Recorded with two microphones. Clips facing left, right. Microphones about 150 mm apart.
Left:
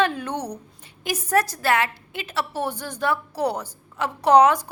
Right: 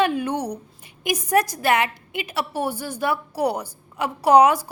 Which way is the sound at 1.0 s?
15° right (ahead or behind).